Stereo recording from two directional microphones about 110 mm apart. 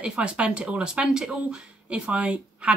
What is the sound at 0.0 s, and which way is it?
Speech, 10° right (ahead or behind).